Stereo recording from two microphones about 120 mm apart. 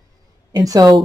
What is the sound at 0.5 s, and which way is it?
Speech, 30° right (ahead or behind).